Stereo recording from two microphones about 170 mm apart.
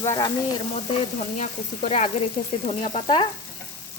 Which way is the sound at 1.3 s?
45° left (ahead or behind).